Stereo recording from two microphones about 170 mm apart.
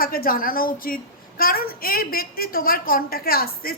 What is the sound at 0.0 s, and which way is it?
A woman's voice, 60° left (ahead or behind).